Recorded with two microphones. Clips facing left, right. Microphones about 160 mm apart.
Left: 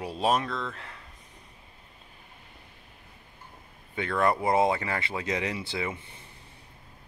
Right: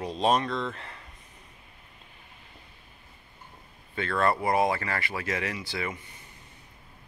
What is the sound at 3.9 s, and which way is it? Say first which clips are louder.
Speech: even; 15° left (ahead or behind).